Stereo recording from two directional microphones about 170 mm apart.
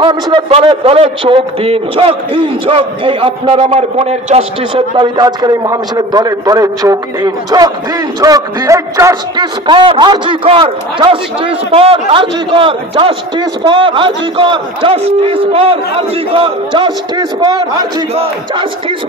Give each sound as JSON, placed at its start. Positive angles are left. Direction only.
{"t": 0.0, "sound": "a man's voice", "side_deg": -30}
{"t": 18.1, "sound": "a man's voice", "side_deg": -35}